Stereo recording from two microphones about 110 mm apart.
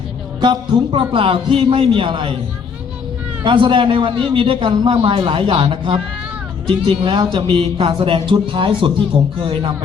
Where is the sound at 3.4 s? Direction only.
50° right (ahead or behind).